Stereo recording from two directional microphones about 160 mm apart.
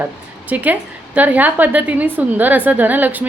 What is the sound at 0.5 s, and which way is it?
A woman's voice, 10° right (ahead or behind).